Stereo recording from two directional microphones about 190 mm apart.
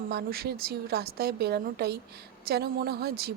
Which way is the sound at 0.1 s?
55° right (ahead or behind).